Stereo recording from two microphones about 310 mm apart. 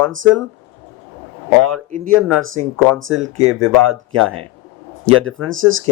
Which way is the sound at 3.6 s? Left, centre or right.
Right.